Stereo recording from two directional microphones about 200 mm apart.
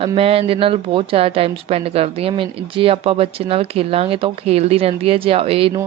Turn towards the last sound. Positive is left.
turn(degrees=-30)  # may be behind; listen again after turning